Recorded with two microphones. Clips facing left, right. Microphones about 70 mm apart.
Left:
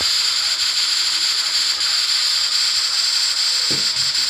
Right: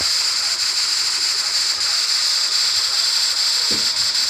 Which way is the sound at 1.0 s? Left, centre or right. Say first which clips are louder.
Left 2 dB; centre.